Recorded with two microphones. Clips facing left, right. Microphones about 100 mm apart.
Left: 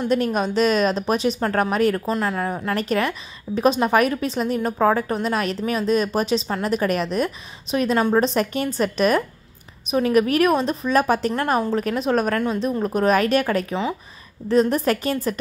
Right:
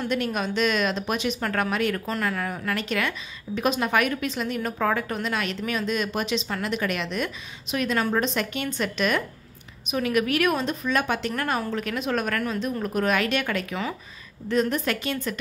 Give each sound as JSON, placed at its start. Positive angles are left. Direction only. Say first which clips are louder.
{"t": 0.1, "sound": "a woman's voice", "louder": "left 7 dB", "side_deg": 35}
{"t": 2.0, "sound": "a woman's voice", "louder": "left 5 dB", "side_deg": 25}